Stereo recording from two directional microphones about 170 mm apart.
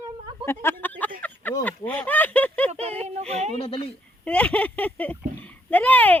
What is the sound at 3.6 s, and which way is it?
Speech, 30° left (ahead or behind).